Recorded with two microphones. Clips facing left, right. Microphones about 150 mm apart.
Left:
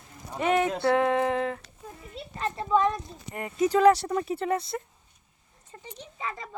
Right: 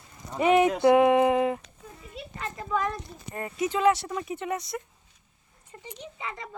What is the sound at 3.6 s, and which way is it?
Speech, 35° left (ahead or behind).